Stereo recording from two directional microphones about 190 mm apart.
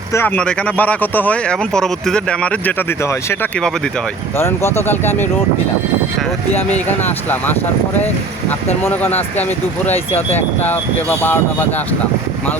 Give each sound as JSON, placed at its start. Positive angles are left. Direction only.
{"t": 0.1, "sound": "speech", "side_deg": 10}
{"t": 4.4, "sound": "speech", "side_deg": 15}
{"t": 6.5, "sound": "speech", "side_deg": 35}
{"t": 7.0, "sound": "speech", "side_deg": 10}